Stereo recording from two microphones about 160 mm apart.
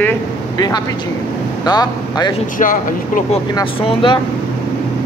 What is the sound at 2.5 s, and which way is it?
Speech, 55° left (ahead or behind).